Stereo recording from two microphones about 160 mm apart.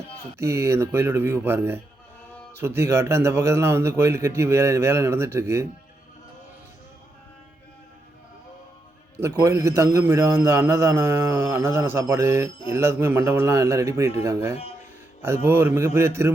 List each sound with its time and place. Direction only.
0.3 s a man's voice: 15° right (ahead or behind)
9.4 s a man's voice: 20° right (ahead or behind)
15.2 s a man's voice: 15° right (ahead or behind)